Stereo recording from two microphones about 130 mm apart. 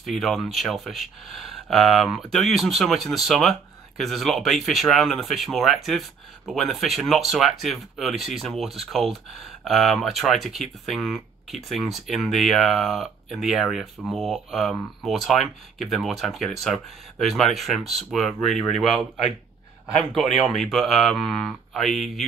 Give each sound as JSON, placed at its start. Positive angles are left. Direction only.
{"t": 0.2, "sound": "speech", "side_deg": 0}
{"t": 20.5, "sound": "speech", "side_deg": 0}